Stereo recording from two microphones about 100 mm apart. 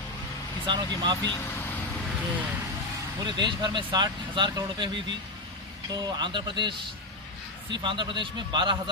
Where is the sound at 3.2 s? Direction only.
50° right (ahead or behind).